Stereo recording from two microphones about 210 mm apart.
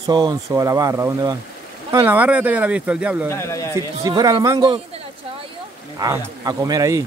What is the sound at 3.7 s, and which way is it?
Speech, 15° right (ahead or behind).